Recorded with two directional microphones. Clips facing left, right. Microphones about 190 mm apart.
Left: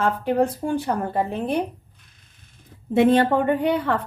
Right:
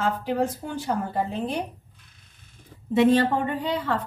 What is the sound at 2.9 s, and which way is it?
Speech, 55° left (ahead or behind).